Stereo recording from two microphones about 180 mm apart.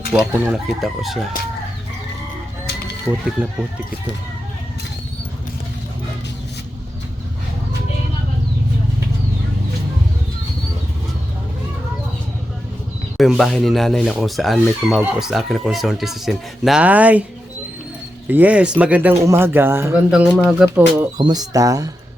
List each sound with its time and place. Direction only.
0.1 s speech: 10° right (ahead or behind)
3.1 s speech: 5° left (ahead or behind)
13.1 s speech: centre (ahead or behind)
18.3 s speech: 10° right (ahead or behind)
21.2 s speech: 25° right (ahead or behind)